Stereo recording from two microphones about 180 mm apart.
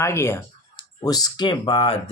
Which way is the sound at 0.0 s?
15° left (ahead or behind).